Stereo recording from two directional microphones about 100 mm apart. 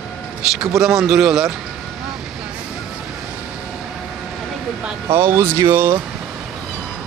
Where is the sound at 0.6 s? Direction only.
5° right (ahead or behind).